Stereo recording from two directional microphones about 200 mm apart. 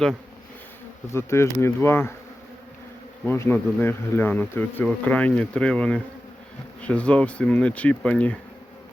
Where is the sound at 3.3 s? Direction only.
10° left (ahead or behind).